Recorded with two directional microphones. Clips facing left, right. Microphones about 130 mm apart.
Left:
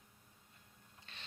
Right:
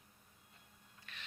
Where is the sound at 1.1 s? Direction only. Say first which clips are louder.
Right 2 dB; 30° left (ahead or behind).